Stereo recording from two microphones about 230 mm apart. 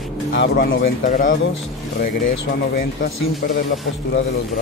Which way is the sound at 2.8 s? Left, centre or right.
Left.